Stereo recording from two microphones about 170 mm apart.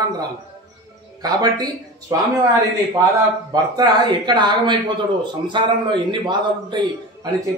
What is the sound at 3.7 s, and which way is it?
A man's voice, 25° right (ahead or behind).